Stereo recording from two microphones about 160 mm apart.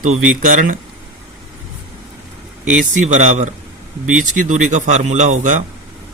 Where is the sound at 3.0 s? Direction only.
50° right (ahead or behind).